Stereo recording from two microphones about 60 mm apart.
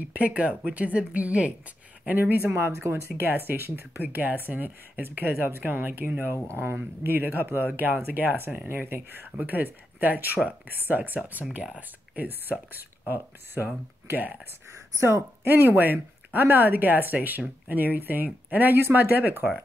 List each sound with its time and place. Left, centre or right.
0.1 s a woman's voice: right
2.0 s speech: right
2.5 s speech: right
15.0 s speech: right
15.4 s speech: right